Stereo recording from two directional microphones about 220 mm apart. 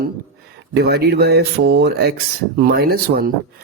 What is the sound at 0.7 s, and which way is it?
Speech, 45° right (ahead or behind).